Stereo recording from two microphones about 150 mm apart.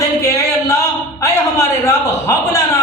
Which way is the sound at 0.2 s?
20° left (ahead or behind).